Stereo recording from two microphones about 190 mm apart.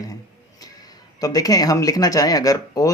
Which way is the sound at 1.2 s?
20° left (ahead or behind).